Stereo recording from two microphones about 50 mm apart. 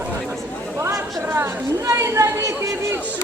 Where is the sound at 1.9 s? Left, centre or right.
Right.